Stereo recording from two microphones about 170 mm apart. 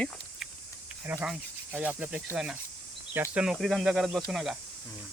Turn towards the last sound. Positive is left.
turn(degrees=0)  # may be behind; listen again after turning